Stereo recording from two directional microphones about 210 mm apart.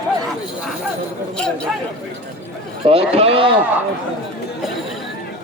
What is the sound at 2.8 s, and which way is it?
Speech, 30° right (ahead or behind).